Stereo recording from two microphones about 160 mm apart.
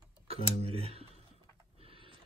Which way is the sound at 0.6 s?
40° right (ahead or behind).